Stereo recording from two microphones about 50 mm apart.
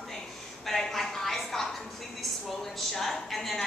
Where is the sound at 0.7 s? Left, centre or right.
Centre.